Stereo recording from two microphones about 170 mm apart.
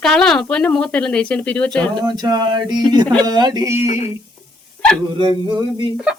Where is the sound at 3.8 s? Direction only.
35° left (ahead or behind).